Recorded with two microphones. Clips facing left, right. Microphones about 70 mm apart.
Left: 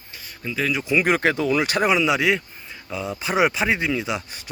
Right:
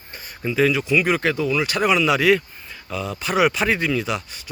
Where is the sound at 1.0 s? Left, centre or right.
Left.